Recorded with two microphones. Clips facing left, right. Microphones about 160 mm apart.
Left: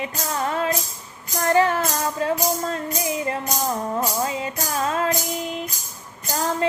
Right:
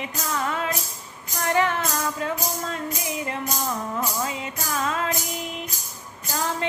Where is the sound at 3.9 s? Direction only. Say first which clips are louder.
Left 4 dB; 35° left (ahead or behind).